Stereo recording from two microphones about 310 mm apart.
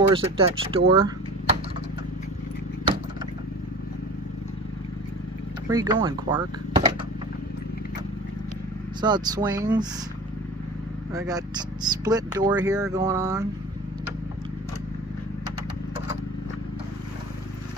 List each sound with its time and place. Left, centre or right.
0.1 s speech: centre
5.7 s speech: centre
9.0 s speech: centre
11.1 s speech: centre